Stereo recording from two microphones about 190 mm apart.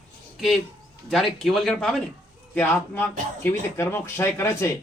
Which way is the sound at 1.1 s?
Centre (ahead or behind).